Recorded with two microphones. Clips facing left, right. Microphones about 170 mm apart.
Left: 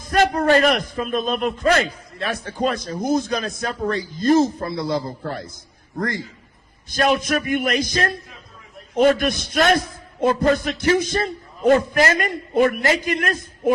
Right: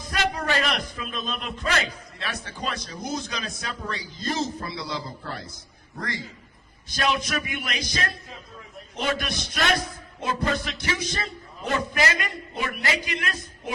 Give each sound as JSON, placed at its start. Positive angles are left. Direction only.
{"t": 0.0, "sound": "a man's voice", "side_deg": 50}